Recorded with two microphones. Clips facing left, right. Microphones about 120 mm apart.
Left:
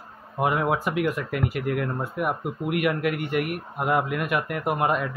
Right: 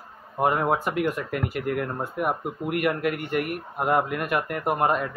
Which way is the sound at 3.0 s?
5° left (ahead or behind).